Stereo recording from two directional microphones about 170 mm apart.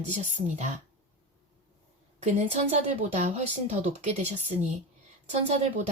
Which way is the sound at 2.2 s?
40° right (ahead or behind).